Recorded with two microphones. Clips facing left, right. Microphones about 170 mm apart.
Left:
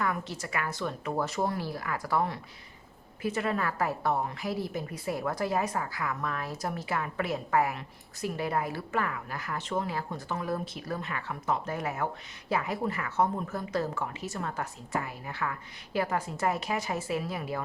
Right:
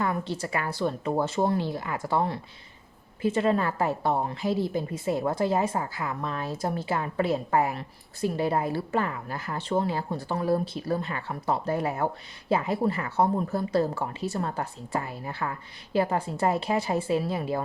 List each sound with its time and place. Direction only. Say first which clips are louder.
0.0 s a woman's voice: right 4 dB; 30° right (ahead or behind)